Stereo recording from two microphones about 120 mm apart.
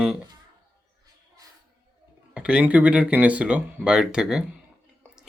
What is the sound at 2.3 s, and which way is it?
Speech, 10° right (ahead or behind).